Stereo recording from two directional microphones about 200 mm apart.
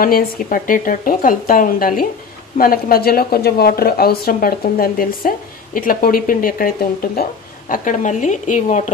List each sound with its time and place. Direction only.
0.0 s a woman's voice: 45° left (ahead or behind)